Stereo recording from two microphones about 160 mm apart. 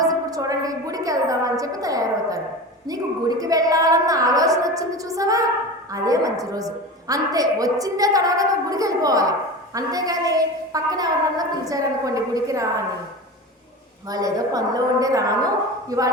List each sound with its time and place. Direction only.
0.0 s a sound: 20° right (ahead or behind)
2.8 s a woman's voice: 25° right (ahead or behind)
14.1 s a woman's voice: 20° right (ahead or behind)